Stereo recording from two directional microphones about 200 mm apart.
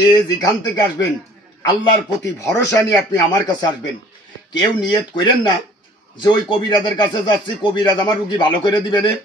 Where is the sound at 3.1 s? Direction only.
20° left (ahead or behind).